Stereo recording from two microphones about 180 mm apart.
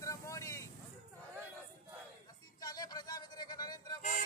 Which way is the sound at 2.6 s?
20° left (ahead or behind).